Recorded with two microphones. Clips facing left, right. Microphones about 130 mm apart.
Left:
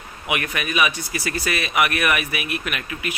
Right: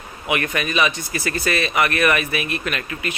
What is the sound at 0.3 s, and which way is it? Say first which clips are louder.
Speech: right 3 dB; 10° left (ahead or behind).